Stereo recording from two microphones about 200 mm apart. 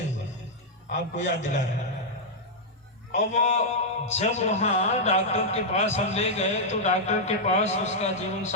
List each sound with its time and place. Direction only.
0.9 s a man's voice: 35° left (ahead or behind)
3.1 s a man's voice: 35° left (ahead or behind)